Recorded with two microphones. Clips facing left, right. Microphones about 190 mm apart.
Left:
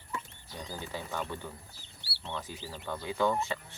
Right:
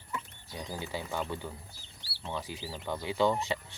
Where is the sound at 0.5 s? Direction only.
15° right (ahead or behind).